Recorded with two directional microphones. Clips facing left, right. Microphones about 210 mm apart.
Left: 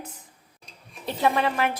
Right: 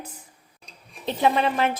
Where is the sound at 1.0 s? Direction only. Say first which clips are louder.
Right 2 dB; 20° right (ahead or behind).